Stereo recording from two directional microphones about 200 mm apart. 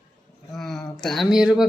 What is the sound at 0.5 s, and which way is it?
Speech, centre (ahead or behind).